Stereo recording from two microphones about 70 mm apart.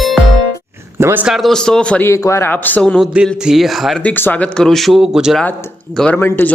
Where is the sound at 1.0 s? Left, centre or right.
Right.